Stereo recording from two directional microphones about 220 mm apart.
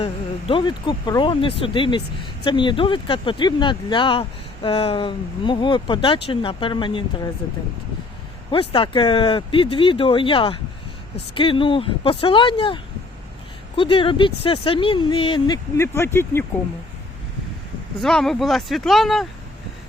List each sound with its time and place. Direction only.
0.0 s speech: 25° left (ahead or behind)
8.4 s speech: 25° left (ahead or behind)
18.0 s speech: centre (ahead or behind)